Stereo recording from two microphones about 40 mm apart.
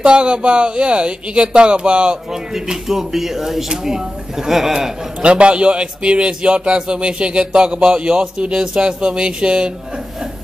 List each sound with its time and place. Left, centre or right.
0.0 s a man's voice: right
2.5 s speech: centre
5.2 s a man's voice: right